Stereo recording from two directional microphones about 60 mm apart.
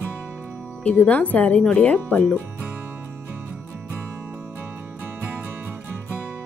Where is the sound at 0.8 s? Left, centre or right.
Left.